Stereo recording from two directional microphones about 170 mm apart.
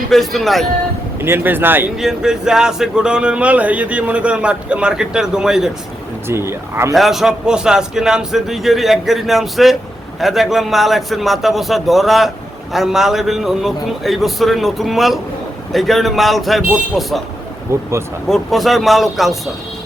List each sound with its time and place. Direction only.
0.1 s speech: centre (ahead or behind)
1.2 s speech: 10° right (ahead or behind)
6.2 s speech: 15° right (ahead or behind)
6.9 s speech: centre (ahead or behind)
17.7 s speech: 15° right (ahead or behind)
18.3 s speech: centre (ahead or behind)